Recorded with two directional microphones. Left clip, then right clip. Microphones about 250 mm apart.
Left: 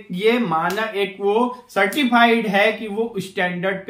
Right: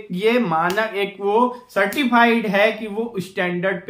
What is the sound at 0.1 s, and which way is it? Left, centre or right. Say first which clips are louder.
Speech: even; centre.